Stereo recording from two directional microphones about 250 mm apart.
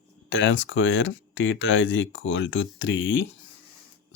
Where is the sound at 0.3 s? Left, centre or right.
Left.